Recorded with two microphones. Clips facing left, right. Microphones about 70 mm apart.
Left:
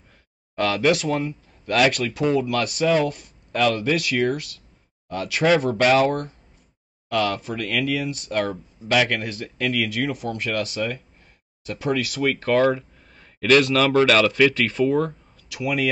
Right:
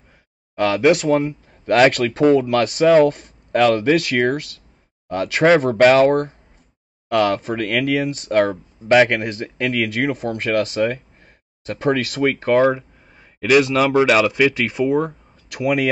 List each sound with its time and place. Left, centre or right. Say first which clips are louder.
0.6 s speech: right 5 dB; right
12.3 s speech: right 3 dB; right
15.5 s speech: right 5 dB; right